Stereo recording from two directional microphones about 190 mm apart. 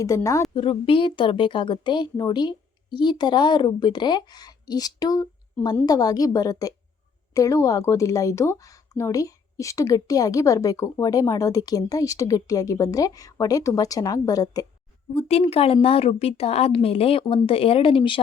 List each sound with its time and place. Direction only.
0.0 s a woman's voice: 15° left (ahead or behind)
0.5 s a woman's voice: 30° left (ahead or behind)
15.1 s speech: 35° left (ahead or behind)